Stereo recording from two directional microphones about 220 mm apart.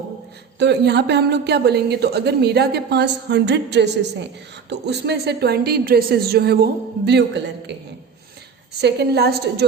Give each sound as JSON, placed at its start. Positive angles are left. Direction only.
{"t": 0.6, "sound": "a woman's voice", "side_deg": -50}
{"t": 8.8, "sound": "a woman's voice", "side_deg": -50}